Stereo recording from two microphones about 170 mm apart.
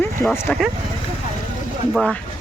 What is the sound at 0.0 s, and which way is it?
Speech, 10° left (ahead or behind).